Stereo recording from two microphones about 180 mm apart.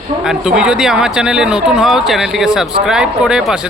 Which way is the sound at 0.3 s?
5° right (ahead or behind).